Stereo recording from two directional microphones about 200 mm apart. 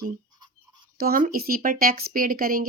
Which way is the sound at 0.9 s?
45° right (ahead or behind).